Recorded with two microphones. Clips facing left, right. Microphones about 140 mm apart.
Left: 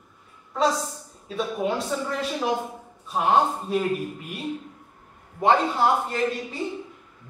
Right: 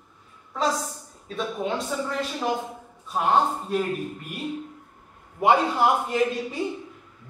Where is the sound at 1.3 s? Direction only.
5° left (ahead or behind).